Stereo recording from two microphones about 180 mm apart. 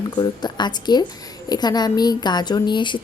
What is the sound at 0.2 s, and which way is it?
A woman's voice, 25° left (ahead or behind).